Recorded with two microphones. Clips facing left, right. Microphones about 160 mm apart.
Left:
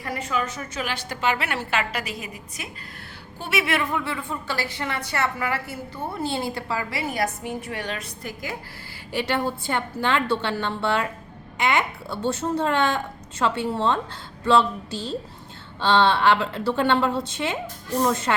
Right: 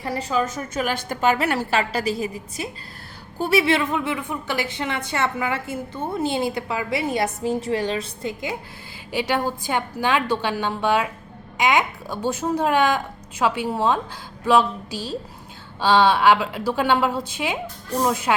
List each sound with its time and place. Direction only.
0.0 s a woman's voice: 35° right (ahead or behind)
0.7 s a woman's voice: 50° right (ahead or behind); by 18.3 s 10° right (ahead or behind)